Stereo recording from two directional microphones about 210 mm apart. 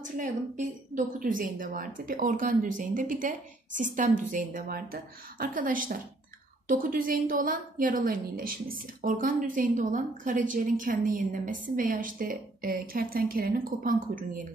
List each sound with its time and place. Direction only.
0.0 s a woman's voice: 40° right (ahead or behind)